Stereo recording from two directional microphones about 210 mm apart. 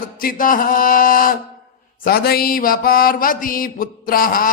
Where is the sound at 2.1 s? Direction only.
45° left (ahead or behind).